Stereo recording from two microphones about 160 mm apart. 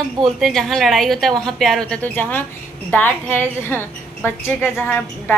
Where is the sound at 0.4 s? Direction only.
Centre (ahead or behind).